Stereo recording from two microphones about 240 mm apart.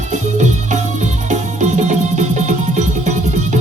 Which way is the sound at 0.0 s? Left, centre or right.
Right.